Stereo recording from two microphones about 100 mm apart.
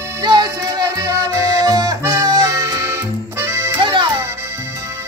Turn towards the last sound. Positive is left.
turn(degrees=-25)  # may be behind; listen again after turning